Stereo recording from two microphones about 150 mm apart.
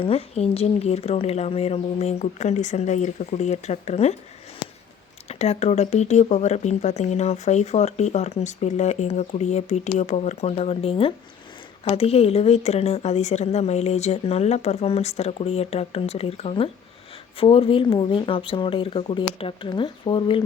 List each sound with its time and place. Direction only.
0.0 s speech: 40° left (ahead or behind)
5.3 s speech: 45° left (ahead or behind)